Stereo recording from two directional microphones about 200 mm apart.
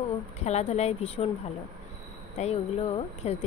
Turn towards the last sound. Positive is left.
turn(degrees=30)  # may be behind; listen again after turning